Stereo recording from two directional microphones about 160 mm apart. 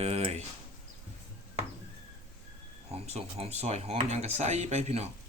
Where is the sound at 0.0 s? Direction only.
40° right (ahead or behind).